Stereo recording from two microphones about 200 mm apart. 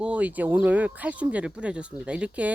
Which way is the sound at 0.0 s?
5° right (ahead or behind).